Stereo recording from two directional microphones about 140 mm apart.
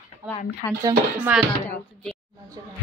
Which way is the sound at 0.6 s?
25° left (ahead or behind).